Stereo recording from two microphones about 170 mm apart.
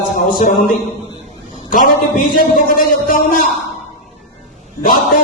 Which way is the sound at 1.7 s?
55° left (ahead or behind).